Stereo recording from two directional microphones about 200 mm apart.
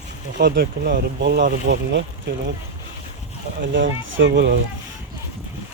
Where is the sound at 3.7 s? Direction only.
65° right (ahead or behind).